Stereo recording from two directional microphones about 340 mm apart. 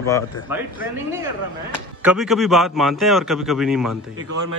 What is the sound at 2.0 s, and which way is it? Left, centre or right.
A man's voice, centre.